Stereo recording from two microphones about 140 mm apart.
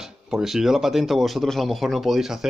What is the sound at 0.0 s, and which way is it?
Speech, centre (ahead or behind).